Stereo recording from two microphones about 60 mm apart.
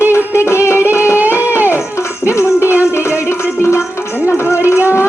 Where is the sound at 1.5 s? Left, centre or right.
Right.